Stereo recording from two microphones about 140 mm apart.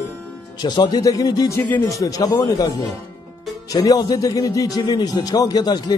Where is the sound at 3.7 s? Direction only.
25° left (ahead or behind).